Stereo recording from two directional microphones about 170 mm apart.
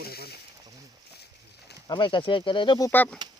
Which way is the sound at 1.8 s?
25° left (ahead or behind).